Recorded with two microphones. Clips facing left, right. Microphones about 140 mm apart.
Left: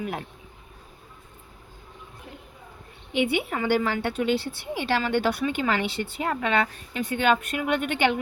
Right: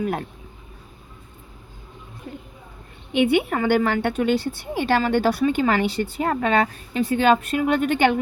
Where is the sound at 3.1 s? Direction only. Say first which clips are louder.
Right 6 dB; 55° right (ahead or behind).